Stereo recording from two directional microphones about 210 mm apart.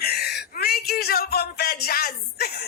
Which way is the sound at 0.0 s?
50° left (ahead or behind).